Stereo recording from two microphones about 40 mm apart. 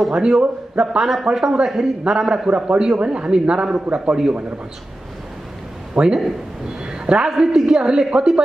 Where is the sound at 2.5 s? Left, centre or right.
Right.